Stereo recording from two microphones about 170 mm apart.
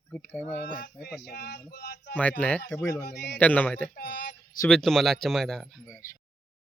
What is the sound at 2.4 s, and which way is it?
Speech, 10° left (ahead or behind).